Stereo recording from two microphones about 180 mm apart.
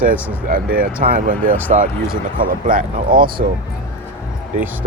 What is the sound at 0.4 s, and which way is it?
Speech, 50° right (ahead or behind).